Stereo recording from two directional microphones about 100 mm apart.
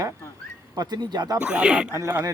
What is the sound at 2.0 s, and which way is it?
Speech, 30° right (ahead or behind).